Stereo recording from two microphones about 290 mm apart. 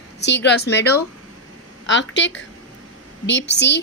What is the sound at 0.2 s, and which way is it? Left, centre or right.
A woman's voice, left.